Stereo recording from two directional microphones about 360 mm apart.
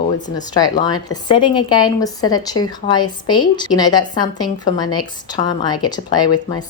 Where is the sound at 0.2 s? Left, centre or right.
Centre.